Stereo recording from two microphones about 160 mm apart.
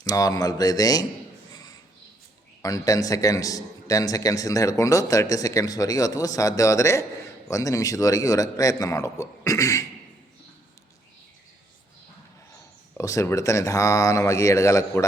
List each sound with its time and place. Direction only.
0.0 s a man's voice: 20° left (ahead or behind)
1.5 s a sound: 25° left (ahead or behind)
2.6 s a man's voice: 20° left (ahead or behind)
13.0 s a man's voice: 20° left (ahead or behind)